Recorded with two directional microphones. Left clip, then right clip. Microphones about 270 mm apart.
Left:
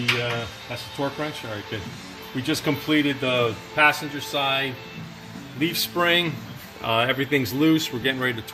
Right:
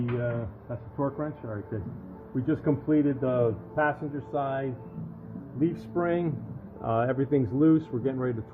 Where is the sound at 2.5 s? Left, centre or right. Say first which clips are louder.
Left 3 dB; centre.